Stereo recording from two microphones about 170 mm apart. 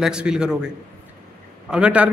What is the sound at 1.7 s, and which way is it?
Speech, 5° right (ahead or behind).